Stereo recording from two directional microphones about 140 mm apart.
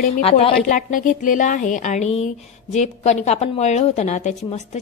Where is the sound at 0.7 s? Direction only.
70° left (ahead or behind).